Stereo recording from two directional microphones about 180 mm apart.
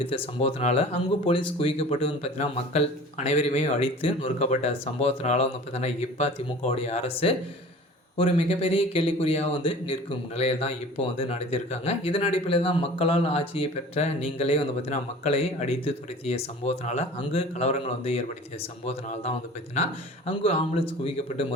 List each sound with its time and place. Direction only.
0.3 s speech: 35° left (ahead or behind)
20.4 s speech: 35° left (ahead or behind)